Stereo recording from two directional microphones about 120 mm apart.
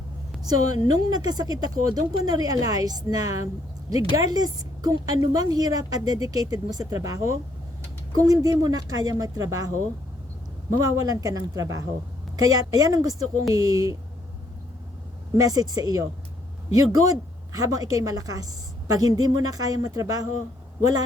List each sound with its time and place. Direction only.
0.4 s speech: 30° right (ahead or behind)
15.3 s speech: 30° right (ahead or behind)
17.5 s speech: 30° right (ahead or behind)